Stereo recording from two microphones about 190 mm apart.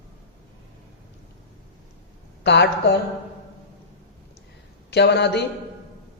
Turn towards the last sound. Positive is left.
turn(degrees=60)  # may be behind; listen again after turning